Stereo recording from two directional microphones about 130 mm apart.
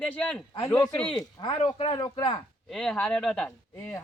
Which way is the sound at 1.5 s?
50° left (ahead or behind).